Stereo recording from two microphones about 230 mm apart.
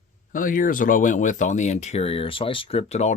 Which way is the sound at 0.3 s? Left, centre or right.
Left.